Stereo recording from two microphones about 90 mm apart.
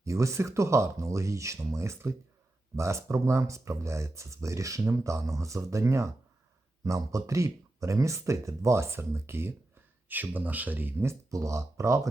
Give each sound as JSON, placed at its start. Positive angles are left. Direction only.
{"t": 0.0, "sound": "speech", "side_deg": -35}